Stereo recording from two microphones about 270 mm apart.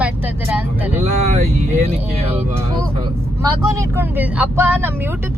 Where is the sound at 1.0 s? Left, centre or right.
Right.